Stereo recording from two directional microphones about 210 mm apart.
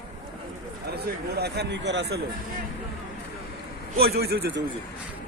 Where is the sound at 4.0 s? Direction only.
50° right (ahead or behind).